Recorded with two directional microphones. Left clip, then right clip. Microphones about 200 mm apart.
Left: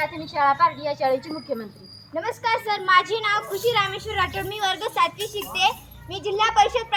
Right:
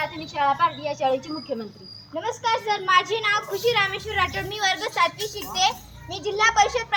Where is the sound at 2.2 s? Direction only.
Centre (ahead or behind).